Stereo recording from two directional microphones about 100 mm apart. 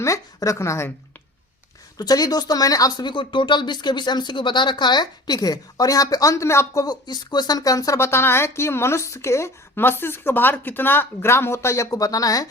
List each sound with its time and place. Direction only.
0.0 s speech: 35° left (ahead or behind)
2.0 s speech: 40° left (ahead or behind)
3.1 s speech: 50° left (ahead or behind); by 6.8 s 30° left (ahead or behind)
6.8 s speech: 45° left (ahead or behind)